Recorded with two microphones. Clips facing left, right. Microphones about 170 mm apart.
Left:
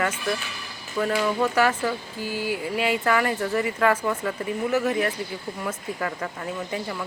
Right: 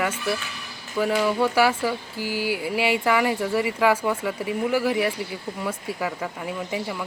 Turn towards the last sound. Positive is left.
turn(degrees=-10)  # may be behind; listen again after turning